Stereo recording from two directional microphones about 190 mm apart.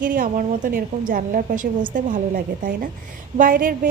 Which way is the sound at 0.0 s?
45° right (ahead or behind).